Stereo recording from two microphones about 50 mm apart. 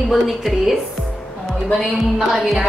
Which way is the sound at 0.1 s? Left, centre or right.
Centre.